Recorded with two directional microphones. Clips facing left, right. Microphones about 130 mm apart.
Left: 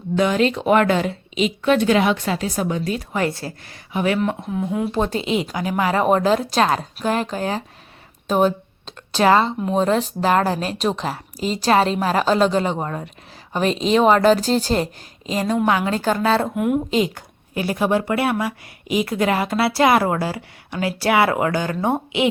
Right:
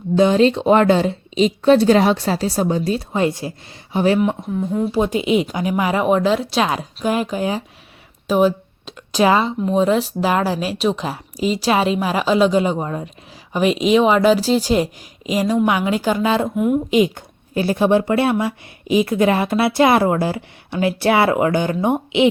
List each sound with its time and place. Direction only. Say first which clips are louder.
0.2 s speech: right 5 dB; 30° right (ahead or behind)
3.9 s speech: right 4 dB; 30° right (ahead or behind)
4.2 s speech: right 3 dB; centre (ahead or behind)
4.9 s speech: right 4 dB; 10° right (ahead or behind)
6.1 s speech: right 1 dB; centre (ahead or behind)
8.3 s a sound: right 2 dB; 5° right (ahead or behind)
9.2 s speech: even; 10° right (ahead or behind)
16.6 s speech: right 2 dB; 5° left (ahead or behind)
16.9 s a woman's voice: right 4 dB; 20° right (ahead or behind)